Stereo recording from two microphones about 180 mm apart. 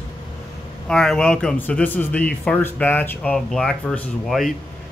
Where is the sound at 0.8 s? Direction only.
5° left (ahead or behind).